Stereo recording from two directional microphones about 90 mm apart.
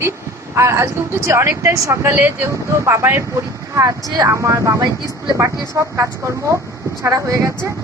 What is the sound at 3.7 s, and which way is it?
A woman's voice, 40° right (ahead or behind).